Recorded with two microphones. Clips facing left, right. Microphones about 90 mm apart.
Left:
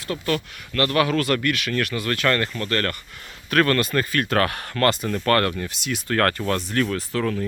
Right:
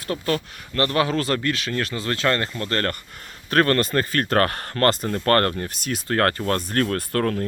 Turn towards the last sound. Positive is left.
turn(degrees=-50)  # may be behind; listen again after turning